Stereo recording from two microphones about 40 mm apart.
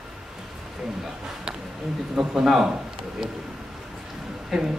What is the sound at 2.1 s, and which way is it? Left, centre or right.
Speech, centre.